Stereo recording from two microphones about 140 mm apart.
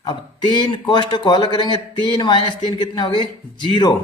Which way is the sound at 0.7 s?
35° left (ahead or behind).